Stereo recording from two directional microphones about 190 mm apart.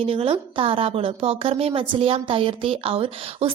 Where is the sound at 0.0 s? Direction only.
30° right (ahead or behind).